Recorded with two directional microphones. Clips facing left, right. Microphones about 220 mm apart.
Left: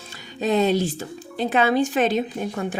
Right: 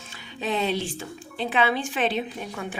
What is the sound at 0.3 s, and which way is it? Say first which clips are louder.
A woman's voice: left 7 dB; 40° left (ahead or behind).